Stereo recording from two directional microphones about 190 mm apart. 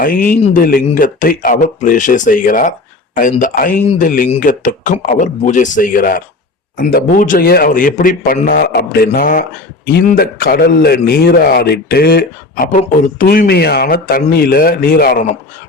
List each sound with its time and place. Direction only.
0.0 s a man's voice: 45° left (ahead or behind)